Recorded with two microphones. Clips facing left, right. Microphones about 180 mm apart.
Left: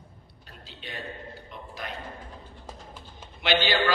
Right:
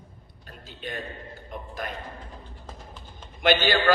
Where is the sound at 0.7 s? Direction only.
50° right (ahead or behind).